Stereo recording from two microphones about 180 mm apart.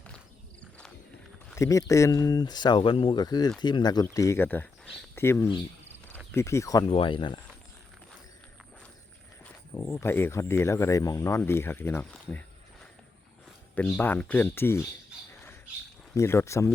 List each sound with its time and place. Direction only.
1.5 s speech: 15° left (ahead or behind)
6.8 s speech: 30° left (ahead or behind)
9.4 s speech: 15° left (ahead or behind)
13.7 s speech: 10° left (ahead or behind)
16.1 s speech: 15° left (ahead or behind)